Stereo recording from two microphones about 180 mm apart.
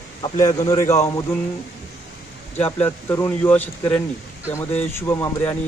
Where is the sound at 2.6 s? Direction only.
10° left (ahead or behind).